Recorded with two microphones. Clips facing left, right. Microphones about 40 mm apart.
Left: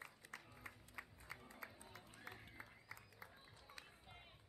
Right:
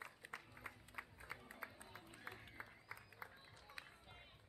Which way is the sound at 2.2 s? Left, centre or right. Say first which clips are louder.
Right 2 dB; centre.